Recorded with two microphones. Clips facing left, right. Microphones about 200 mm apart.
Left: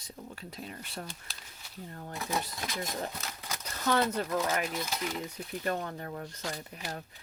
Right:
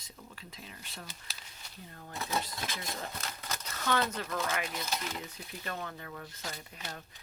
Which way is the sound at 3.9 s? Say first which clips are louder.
Left 4 dB; 35° left (ahead or behind).